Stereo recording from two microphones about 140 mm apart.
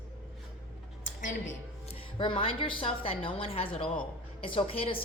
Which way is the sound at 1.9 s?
40° left (ahead or behind).